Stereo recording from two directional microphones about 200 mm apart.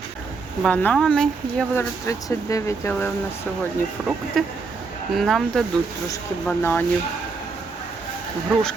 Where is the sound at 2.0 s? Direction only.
15° left (ahead or behind).